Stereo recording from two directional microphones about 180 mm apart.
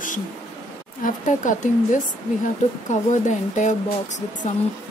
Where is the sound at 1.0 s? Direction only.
45° left (ahead or behind).